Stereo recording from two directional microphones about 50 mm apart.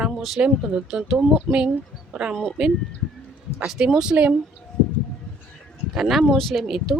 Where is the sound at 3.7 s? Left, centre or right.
Centre.